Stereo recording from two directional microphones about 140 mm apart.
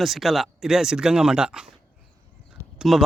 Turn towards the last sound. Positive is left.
turn(degrees=0)  # may be behind; listen again after turning